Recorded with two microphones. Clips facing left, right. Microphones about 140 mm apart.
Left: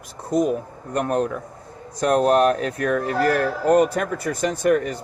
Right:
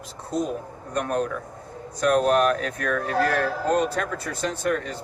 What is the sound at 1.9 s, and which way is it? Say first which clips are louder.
Speech: left 2 dB; 35° left (ahead or behind).